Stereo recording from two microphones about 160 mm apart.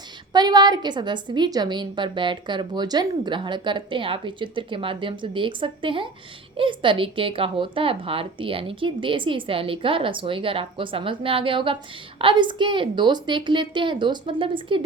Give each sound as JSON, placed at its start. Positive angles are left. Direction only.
{"t": 0.3, "sound": "a woman's voice", "side_deg": -25}